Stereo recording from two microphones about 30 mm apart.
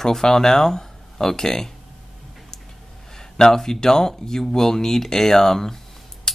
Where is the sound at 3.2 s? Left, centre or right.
Centre.